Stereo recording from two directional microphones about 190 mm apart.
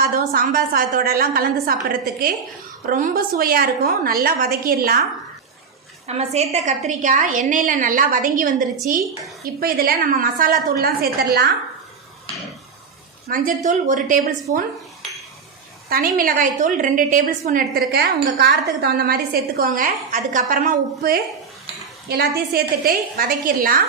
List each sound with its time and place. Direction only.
0.0 s a woman's voice: 50° right (ahead or behind)
6.1 s a woman's voice: 35° right (ahead or behind); by 11.5 s 60° right (ahead or behind)
13.2 s a woman's voice: 50° right (ahead or behind)
15.9 s a woman's voice: 50° right (ahead or behind)